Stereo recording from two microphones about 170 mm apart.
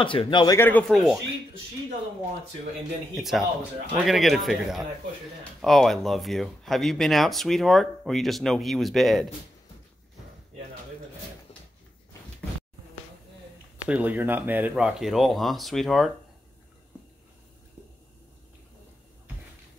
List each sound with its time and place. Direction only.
0.0 s speech: 30° left (ahead or behind)
0.6 s speech: 10° left (ahead or behind)
3.2 s speech: centre (ahead or behind)
13.8 s speech: 10° right (ahead or behind)